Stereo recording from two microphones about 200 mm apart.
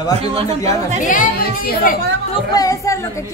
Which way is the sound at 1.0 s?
40° left (ahead or behind).